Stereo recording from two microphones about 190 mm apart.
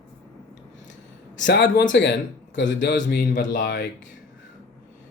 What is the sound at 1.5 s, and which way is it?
Speech, 65° left (ahead or behind).